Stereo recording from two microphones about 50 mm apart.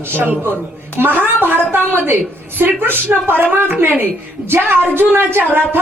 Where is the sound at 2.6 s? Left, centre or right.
Right.